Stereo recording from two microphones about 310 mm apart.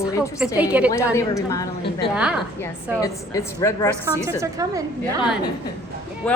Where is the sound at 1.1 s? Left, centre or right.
Centre.